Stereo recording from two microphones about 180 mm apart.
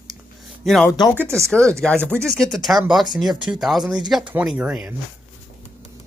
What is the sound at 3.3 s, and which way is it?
Speech, 25° right (ahead or behind).